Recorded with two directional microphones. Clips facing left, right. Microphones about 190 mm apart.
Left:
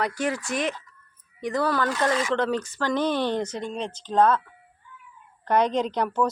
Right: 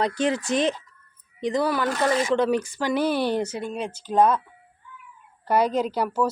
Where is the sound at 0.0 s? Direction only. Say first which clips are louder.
Right 3 dB; 20° right (ahead or behind).